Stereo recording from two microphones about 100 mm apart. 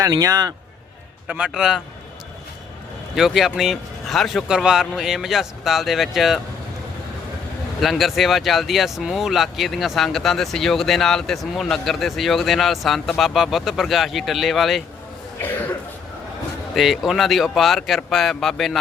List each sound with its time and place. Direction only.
0.0 s a man's voice: 35° right (ahead or behind)
1.3 s a man's voice: 10° right (ahead or behind)
3.2 s speech: 5° right (ahead or behind)
7.8 s speech: centre (ahead or behind)
15.4 s speech: 20° left (ahead or behind)
16.7 s speech: centre (ahead or behind)